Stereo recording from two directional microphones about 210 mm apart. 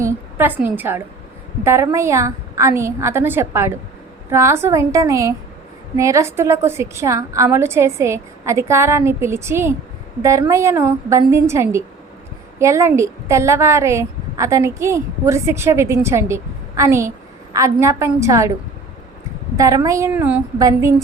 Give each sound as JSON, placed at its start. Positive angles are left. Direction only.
{"t": 0.0, "sound": "a woman's voice", "side_deg": -10}
{"t": 19.5, "sound": "a woman's voice", "side_deg": -15}